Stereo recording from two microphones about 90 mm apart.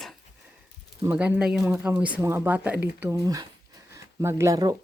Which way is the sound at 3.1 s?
40° right (ahead or behind).